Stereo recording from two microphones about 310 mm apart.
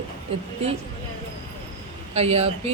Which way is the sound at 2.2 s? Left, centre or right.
Centre.